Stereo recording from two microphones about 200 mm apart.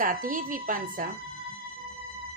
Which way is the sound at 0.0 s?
45° right (ahead or behind).